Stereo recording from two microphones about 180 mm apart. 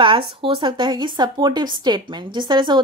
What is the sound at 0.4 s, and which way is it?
Speech, 30° right (ahead or behind).